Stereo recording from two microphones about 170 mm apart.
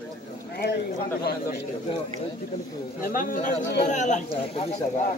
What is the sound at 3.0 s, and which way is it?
A man's voice, 55° left (ahead or behind).